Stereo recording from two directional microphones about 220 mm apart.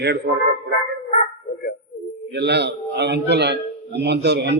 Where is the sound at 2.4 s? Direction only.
50° right (ahead or behind).